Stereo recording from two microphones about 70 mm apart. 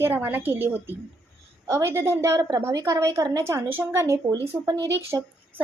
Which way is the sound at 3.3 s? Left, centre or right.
Right.